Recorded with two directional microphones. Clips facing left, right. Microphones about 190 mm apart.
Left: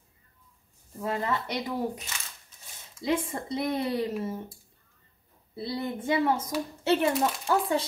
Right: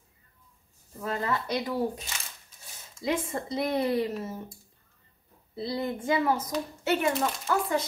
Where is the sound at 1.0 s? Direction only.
20° left (ahead or behind).